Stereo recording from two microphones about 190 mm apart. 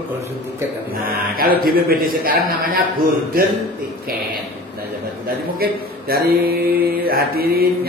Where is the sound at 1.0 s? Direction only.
50° right (ahead or behind).